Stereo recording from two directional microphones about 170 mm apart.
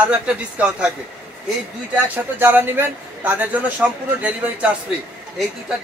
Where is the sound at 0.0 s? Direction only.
5° right (ahead or behind).